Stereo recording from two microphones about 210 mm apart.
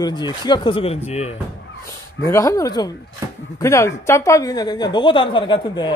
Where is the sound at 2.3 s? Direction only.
15° left (ahead or behind).